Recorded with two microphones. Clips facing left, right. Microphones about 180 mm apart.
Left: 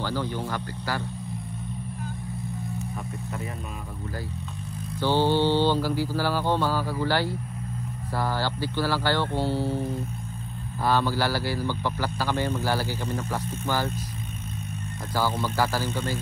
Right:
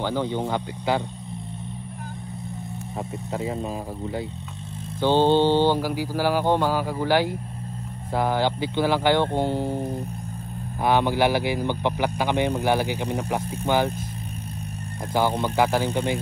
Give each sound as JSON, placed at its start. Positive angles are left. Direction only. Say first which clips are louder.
{"t": 0.0, "sound": "speech", "louder": "right 4 dB", "side_deg": -20}
{"t": 5.0, "sound": "speech", "louder": "right 4 dB", "side_deg": -20}
{"t": 15.4, "sound": "speech", "louder": "right 5 dB", "side_deg": -15}